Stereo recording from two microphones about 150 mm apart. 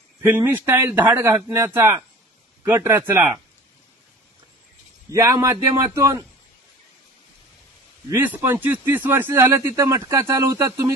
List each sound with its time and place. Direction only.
0.2 s speech: 15° right (ahead or behind)
5.1 s a man's voice: 20° right (ahead or behind)
8.1 s speech: 15° right (ahead or behind)